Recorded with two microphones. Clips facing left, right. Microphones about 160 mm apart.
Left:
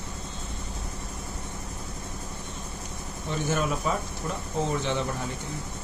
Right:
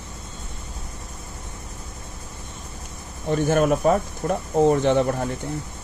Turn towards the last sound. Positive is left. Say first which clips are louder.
# right 9 dB
turn(degrees=-55)  # may be behind; listen again after turning